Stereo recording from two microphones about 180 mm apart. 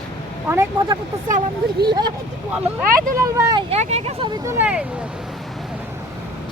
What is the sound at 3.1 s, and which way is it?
Speech, 20° right (ahead or behind).